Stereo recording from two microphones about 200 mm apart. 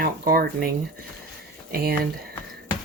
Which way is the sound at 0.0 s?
50° right (ahead or behind).